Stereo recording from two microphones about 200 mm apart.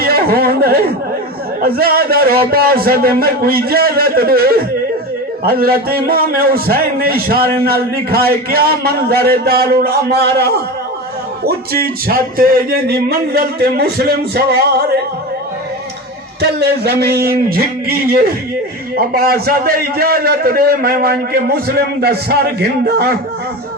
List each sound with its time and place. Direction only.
0.0 s a man's voice: 50° right (ahead or behind)
16.4 s a man's voice: 55° right (ahead or behind)